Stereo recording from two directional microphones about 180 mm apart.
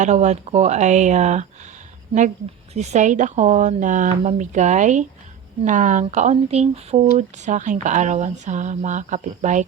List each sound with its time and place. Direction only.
0.0 s speech: 40° right (ahead or behind)
2.7 s speech: 40° right (ahead or behind)